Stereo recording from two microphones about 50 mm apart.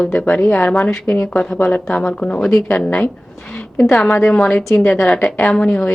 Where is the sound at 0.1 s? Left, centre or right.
Left.